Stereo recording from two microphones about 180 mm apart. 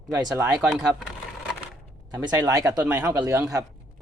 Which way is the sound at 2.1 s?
20° right (ahead or behind).